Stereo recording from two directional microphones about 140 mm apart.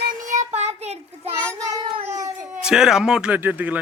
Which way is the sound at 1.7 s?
30° right (ahead or behind).